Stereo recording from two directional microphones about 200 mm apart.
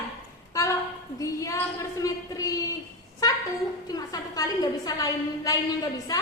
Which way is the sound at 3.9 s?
20° left (ahead or behind).